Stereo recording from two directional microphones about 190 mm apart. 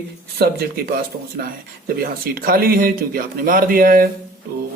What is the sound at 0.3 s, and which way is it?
Speech, 55° right (ahead or behind).